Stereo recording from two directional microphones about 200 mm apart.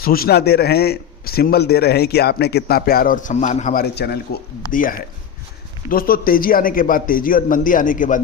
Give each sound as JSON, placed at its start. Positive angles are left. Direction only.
{"t": 0.0, "sound": "a man's voice", "side_deg": 45}
{"t": 3.9, "sound": "a man's voice", "side_deg": 55}